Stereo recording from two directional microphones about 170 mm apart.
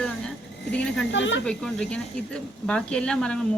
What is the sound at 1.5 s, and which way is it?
Speech, 5° left (ahead or behind).